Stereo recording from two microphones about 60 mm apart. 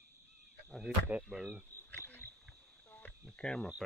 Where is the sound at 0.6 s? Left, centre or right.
Centre.